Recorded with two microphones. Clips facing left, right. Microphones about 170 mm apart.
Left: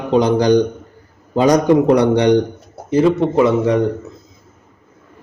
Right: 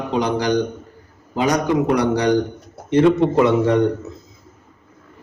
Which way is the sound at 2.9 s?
Centre (ahead or behind).